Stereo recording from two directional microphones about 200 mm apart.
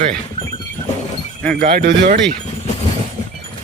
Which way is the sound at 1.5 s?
50° right (ahead or behind).